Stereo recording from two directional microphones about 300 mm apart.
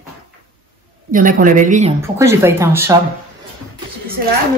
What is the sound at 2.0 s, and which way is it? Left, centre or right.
Speech, centre.